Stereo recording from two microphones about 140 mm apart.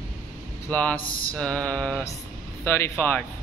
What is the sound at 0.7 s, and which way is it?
Speech, 10° left (ahead or behind).